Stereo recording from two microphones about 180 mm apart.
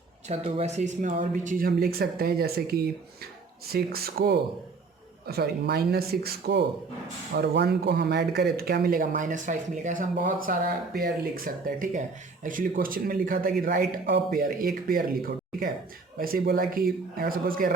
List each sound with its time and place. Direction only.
0.3 s speech: 35° right (ahead or behind); by 15.1 s 55° right (ahead or behind)
16.1 s speech: 55° right (ahead or behind)